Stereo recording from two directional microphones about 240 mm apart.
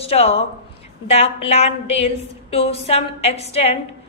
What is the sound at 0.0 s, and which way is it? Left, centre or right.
A woman's voice, left.